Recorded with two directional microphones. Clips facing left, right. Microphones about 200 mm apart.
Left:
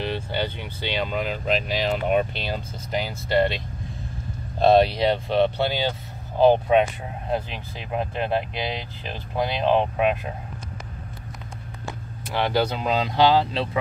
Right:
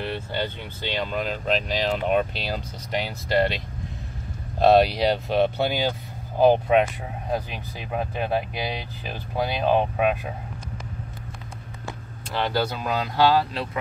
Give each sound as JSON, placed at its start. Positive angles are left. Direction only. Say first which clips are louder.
{"t": 0.0, "sound": "speech", "louder": "left 1 dB", "side_deg": 15}
{"t": 4.6, "sound": "speech", "louder": "even", "side_deg": -5}
{"t": 12.4, "sound": "speech", "louder": "left 2 dB", "side_deg": 15}